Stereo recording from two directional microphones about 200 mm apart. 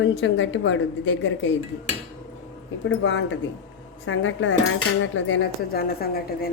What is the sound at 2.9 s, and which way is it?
Cutlery, 65° left (ahead or behind).